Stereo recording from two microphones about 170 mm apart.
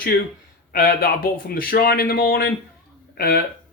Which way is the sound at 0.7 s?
60° left (ahead or behind).